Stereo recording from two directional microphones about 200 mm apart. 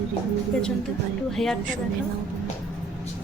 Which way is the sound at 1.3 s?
Centre (ahead or behind).